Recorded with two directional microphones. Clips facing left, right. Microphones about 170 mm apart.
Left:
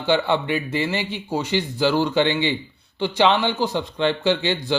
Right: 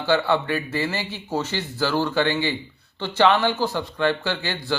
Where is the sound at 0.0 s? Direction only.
20° left (ahead or behind).